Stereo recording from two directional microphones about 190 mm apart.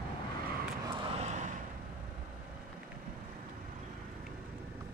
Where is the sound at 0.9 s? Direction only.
35° right (ahead or behind).